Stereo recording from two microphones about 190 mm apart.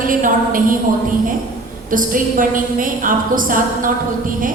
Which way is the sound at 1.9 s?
45° right (ahead or behind).